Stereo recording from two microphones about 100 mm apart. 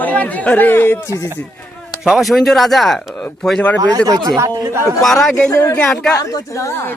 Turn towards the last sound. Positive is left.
turn(degrees=35)  # may be behind; listen again after turning